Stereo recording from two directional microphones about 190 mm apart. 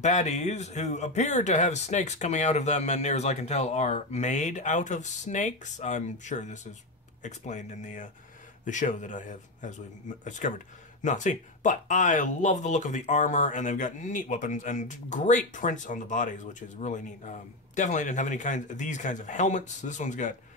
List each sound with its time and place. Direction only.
0.0 s speech: 40° left (ahead or behind)